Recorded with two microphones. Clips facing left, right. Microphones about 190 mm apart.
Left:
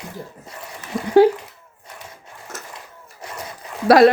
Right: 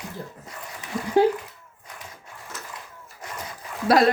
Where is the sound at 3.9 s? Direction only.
75° left (ahead or behind).